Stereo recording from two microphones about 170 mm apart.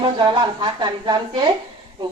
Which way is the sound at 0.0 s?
25° right (ahead or behind).